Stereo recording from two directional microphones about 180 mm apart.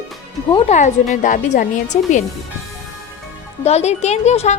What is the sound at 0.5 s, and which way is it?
A woman's voice, 40° left (ahead or behind).